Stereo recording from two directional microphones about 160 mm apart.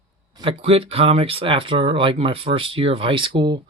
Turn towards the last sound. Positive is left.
turn(degrees=-30)  # may be behind; listen again after turning